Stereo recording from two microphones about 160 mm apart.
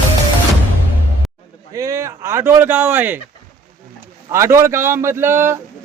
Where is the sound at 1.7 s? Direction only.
20° right (ahead or behind).